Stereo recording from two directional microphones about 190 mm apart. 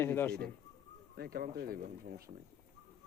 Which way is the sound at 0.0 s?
10° left (ahead or behind).